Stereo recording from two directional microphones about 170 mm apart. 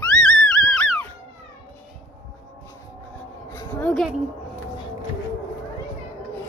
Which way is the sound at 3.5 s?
15° left (ahead or behind).